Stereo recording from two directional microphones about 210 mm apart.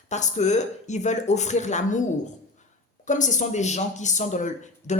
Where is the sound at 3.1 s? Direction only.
35° left (ahead or behind).